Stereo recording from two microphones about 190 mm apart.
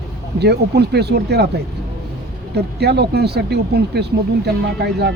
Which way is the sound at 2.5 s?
60° right (ahead or behind).